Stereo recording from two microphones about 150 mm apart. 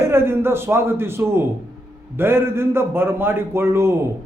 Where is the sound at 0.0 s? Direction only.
15° right (ahead or behind).